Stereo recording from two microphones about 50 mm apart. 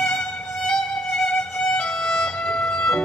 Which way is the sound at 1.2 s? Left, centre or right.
Centre.